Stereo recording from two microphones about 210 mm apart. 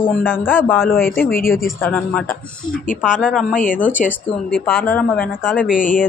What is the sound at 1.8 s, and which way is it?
Speech, 5° left (ahead or behind).